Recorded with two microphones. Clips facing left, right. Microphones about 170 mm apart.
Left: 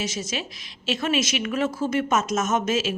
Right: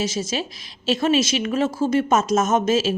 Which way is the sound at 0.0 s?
30° right (ahead or behind).